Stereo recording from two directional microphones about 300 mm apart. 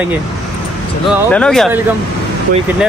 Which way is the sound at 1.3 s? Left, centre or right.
Centre.